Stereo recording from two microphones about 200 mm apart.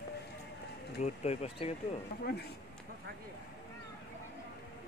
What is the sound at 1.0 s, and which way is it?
Speech, 35° left (ahead or behind).